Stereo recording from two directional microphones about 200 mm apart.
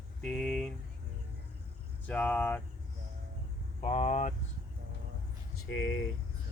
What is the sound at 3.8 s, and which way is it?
Speech, 30° left (ahead or behind).